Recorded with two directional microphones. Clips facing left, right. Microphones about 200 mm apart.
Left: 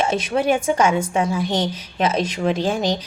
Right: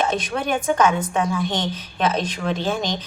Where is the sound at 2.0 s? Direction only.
25° left (ahead or behind).